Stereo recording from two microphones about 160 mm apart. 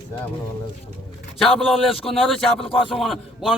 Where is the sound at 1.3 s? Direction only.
Centre (ahead or behind).